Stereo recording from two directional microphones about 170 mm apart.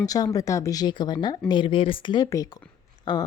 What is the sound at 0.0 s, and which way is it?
A woman's voice, 20° left (ahead or behind).